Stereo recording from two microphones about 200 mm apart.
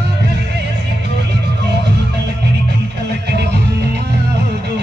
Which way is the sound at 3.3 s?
55° right (ahead or behind).